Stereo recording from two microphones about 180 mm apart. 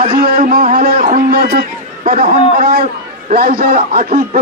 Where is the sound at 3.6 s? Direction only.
55° right (ahead or behind).